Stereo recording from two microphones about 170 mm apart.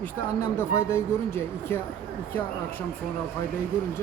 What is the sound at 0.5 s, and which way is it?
Speech, 15° left (ahead or behind).